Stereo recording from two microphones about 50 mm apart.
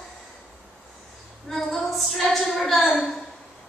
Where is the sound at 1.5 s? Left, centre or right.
Centre.